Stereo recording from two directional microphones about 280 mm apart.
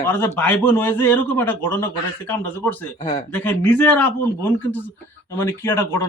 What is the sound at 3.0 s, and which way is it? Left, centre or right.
Speech, left.